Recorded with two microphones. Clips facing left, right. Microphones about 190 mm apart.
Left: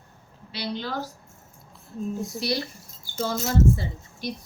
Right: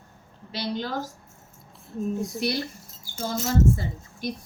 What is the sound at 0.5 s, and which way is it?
Speech, 45° right (ahead or behind).